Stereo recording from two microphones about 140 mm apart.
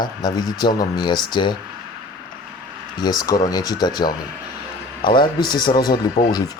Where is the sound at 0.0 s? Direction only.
30° left (ahead or behind).